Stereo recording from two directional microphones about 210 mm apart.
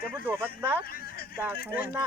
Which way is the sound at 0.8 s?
45° left (ahead or behind).